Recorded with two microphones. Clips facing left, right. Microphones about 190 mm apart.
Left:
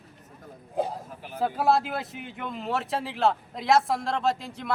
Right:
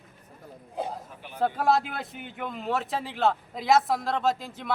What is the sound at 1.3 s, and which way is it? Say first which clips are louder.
Speech: even; 5° left (ahead or behind).